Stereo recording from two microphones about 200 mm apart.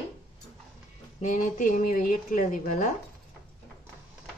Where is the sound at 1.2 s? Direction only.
40° left (ahead or behind).